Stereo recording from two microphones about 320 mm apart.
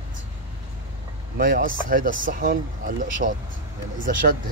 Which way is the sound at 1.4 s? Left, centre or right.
Right.